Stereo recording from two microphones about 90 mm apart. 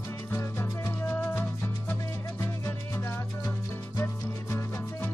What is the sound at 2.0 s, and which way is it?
Music, 35° left (ahead or behind).